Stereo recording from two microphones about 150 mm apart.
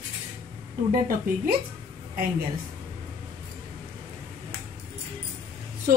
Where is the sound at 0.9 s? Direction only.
70° right (ahead or behind).